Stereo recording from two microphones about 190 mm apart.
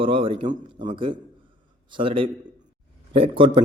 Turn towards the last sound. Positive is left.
turn(degrees=-30)  # may be behind; listen again after turning